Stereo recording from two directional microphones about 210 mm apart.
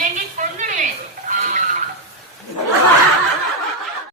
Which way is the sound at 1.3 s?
35° right (ahead or behind).